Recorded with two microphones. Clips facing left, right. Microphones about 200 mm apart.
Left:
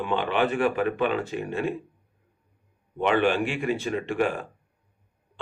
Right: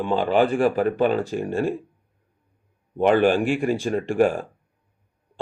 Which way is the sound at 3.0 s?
40° right (ahead or behind).